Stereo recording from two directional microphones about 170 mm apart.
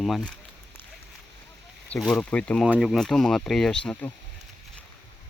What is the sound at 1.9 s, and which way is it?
Speech, 5° left (ahead or behind).